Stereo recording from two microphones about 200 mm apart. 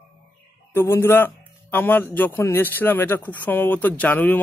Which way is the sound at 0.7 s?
10° left (ahead or behind).